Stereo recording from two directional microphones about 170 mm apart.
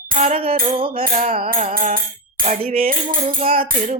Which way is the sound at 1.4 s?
55° right (ahead or behind).